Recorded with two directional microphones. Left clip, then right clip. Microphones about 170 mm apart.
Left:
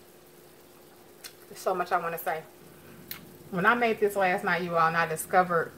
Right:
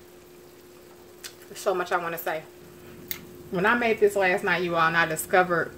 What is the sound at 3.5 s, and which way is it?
A woman's voice, 30° right (ahead or behind).